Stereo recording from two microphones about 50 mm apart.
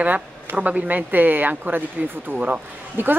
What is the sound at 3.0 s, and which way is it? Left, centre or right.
Speech, right.